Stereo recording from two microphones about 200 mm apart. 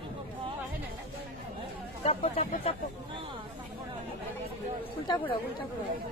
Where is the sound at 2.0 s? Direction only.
30° left (ahead or behind).